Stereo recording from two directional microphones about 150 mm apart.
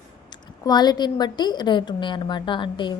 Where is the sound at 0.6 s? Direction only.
25° left (ahead or behind).